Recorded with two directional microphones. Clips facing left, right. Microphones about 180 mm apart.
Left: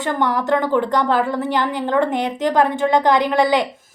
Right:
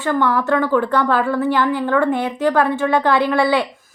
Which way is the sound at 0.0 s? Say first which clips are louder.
Right 2 dB; 20° left (ahead or behind).